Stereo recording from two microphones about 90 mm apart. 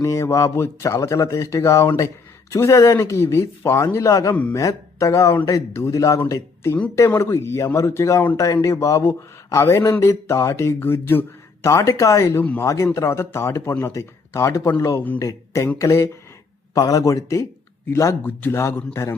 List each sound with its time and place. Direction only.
0.0 s speech: 35° left (ahead or behind)
12.4 s speech: 20° left (ahead or behind)
12.6 s speech: 35° left (ahead or behind)